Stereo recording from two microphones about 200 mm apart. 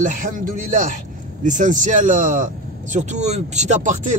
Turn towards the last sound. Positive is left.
turn(degrees=-35)  # may be behind; listen again after turning